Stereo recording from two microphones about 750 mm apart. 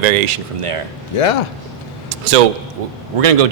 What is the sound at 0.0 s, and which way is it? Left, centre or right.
Speech, right.